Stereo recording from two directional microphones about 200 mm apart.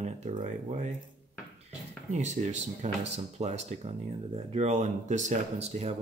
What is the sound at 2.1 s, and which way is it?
Speech, 35° right (ahead or behind).